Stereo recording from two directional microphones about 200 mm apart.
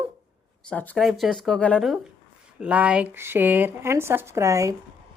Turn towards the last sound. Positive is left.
turn(degrees=-15)  # may be behind; listen again after turning